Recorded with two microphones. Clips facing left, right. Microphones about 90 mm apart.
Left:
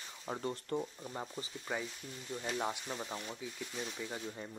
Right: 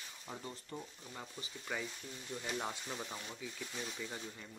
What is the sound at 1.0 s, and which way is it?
Speech, 35° left (ahead or behind).